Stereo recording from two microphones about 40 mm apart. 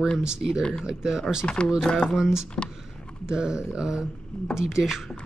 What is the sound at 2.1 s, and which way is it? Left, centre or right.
Speech, centre.